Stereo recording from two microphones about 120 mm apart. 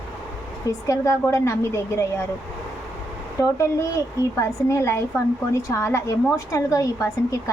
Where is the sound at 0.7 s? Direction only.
25° left (ahead or behind).